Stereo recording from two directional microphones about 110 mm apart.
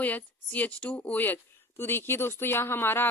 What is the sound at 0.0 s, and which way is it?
A woman's voice, 15° left (ahead or behind).